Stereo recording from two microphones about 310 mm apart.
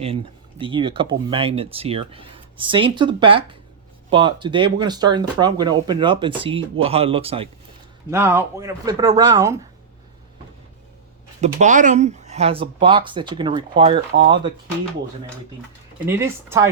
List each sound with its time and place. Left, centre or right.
0.6 s speech: centre
8.1 s speech: centre
11.3 s speech: right
16.0 s speech: centre